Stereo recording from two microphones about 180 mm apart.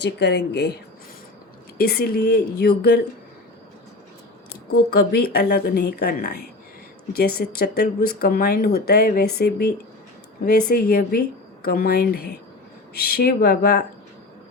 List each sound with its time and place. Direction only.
0.0 s speech: 75° left (ahead or behind)
1.8 s speech: 60° left (ahead or behind)
4.9 s speech: 60° left (ahead or behind)